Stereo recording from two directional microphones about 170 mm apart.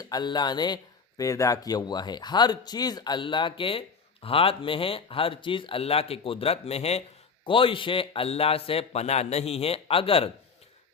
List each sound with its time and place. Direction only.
0.0 s speech: 25° left (ahead or behind)